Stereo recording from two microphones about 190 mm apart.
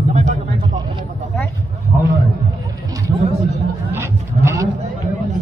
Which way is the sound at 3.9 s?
15° right (ahead or behind).